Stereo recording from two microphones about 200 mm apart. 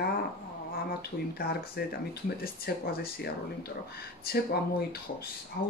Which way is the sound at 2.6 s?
50° left (ahead or behind).